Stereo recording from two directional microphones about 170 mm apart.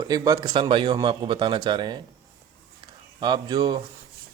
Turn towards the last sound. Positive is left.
turn(degrees=-25)  # may be behind; listen again after turning